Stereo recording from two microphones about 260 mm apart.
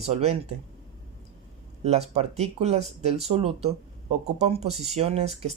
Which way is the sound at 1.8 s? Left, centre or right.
Right.